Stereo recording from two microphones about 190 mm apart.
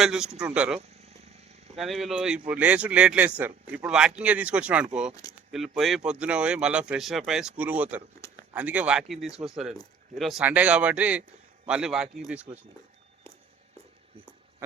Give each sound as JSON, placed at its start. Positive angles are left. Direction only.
{"t": 0.0, "sound": "speech", "side_deg": -5}
{"t": 0.8, "sound": "vehicle", "side_deg": -35}
{"t": 1.7, "sound": "speech", "side_deg": 0}
{"t": 8.2, "sound": "a sound", "side_deg": 15}
{"t": 8.5, "sound": "speech", "side_deg": -5}